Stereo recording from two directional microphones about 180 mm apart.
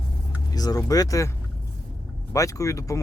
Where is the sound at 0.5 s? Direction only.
20° left (ahead or behind).